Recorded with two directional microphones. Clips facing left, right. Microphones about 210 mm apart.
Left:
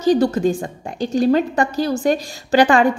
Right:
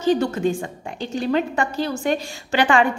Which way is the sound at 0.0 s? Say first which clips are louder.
Left 4 dB; 40° left (ahead or behind).